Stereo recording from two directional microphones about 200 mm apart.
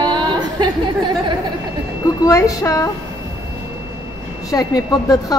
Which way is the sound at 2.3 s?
15° left (ahead or behind).